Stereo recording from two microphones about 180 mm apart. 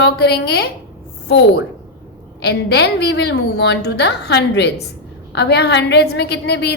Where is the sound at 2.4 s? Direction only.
65° left (ahead or behind).